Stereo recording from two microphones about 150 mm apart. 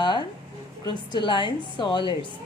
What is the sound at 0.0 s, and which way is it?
Music, 30° left (ahead or behind).